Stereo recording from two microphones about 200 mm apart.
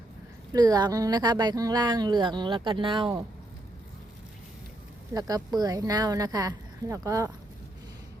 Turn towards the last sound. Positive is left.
turn(degrees=-15)  # may be behind; listen again after turning